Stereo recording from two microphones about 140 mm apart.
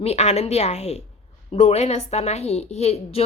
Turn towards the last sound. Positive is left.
turn(degrees=45)  # may be behind; listen again after turning